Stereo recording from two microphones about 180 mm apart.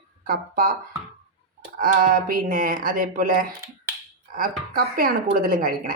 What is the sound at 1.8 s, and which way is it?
Speech, 50° right (ahead or behind).